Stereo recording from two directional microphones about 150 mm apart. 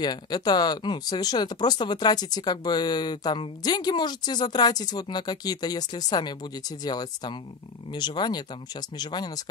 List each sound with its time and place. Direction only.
0.0 s speech: 25° left (ahead or behind)